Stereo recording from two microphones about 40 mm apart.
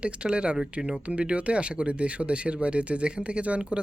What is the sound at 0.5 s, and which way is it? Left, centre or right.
Speech, centre.